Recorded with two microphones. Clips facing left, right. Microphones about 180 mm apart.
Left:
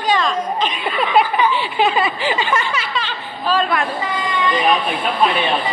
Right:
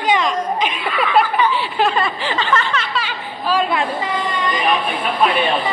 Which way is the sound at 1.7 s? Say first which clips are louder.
Left 2 dB; 5° left (ahead or behind).